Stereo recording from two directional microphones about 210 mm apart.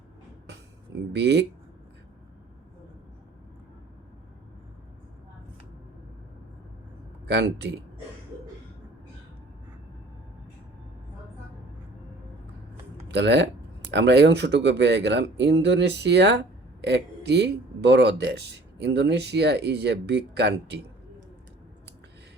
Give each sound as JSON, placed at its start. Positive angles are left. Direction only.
{"t": 1.1, "sound": "speech", "side_deg": -55}
{"t": 7.3, "sound": "speech", "side_deg": -55}
{"t": 13.1, "sound": "speech", "side_deg": -55}